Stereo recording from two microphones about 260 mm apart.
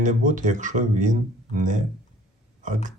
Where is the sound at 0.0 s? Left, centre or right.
Right.